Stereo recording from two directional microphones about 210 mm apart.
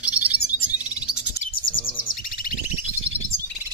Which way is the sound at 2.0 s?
40° left (ahead or behind).